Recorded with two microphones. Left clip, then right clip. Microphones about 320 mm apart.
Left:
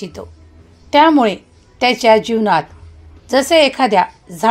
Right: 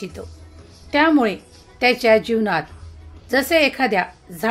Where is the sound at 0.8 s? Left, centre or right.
Centre.